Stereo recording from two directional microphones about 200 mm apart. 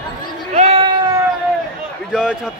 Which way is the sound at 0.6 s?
30° right (ahead or behind).